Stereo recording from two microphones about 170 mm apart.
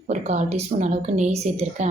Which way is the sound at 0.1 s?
40° right (ahead or behind).